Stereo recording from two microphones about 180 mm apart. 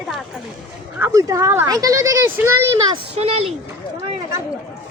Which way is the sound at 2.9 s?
35° right (ahead or behind).